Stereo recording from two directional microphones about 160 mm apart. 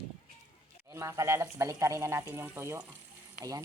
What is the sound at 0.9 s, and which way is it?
Speech, 20° right (ahead or behind).